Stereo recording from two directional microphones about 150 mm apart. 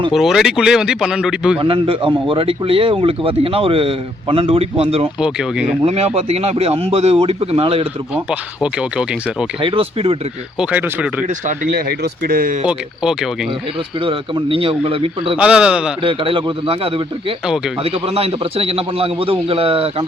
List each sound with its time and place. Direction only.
0.1 s speech: centre (ahead or behind)
1.5 s speech: 35° right (ahead or behind)
5.2 s speech: 5° right (ahead or behind)
5.8 s speech: 45° right (ahead or behind)
8.1 s speech: 5° right (ahead or behind)
9.6 s speech: 35° right (ahead or behind)
10.6 s speech: 10° right (ahead or behind)
11.3 s speech: 65° right (ahead or behind)
12.6 s speech: 5° right (ahead or behind)
14.0 s speech: 35° right (ahead or behind)
15.4 s speech: 5° right (ahead or behind)
16.0 s speech: 35° right (ahead or behind)